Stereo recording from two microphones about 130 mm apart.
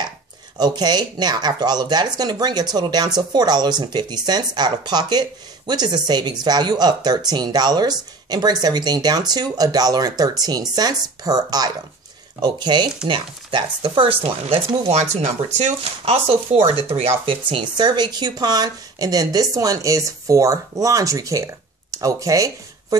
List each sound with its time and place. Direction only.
0.6 s speech: 35° right (ahead or behind)